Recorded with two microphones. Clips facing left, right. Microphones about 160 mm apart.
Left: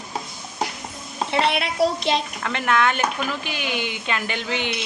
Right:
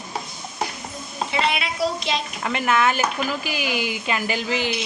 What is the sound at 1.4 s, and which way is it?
Speech, 60° left (ahead or behind).